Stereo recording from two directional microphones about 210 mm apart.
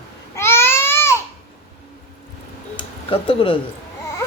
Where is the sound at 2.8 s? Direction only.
25° left (ahead or behind).